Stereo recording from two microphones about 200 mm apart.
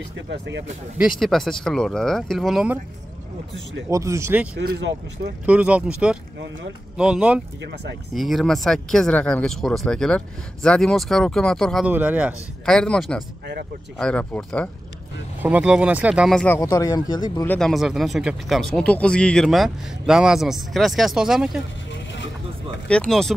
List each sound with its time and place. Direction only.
0.3 s speech: 65° right (ahead or behind)
0.9 s speech: centre (ahead or behind)
3.9 s speech: 15° right (ahead or behind)
4.6 s speech: 60° right (ahead or behind)
5.5 s speech: 5° right (ahead or behind)
12.6 s speech: 5° left (ahead or behind)
15.4 s speech: 5° right (ahead or behind); by 17.5 s 20° left (ahead or behind)
17.5 s speech: centre (ahead or behind)
21.9 s vehicle: 65° left (ahead or behind)
22.8 s speech: 5° left (ahead or behind)